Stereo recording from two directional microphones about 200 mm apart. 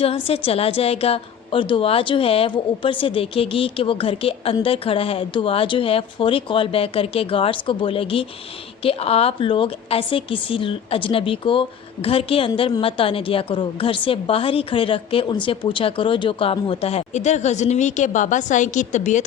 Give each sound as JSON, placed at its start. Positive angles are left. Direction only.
{"t": 0.0, "sound": "a woman's voice", "side_deg": 30}